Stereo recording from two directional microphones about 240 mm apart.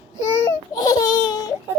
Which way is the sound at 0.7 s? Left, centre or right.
Centre.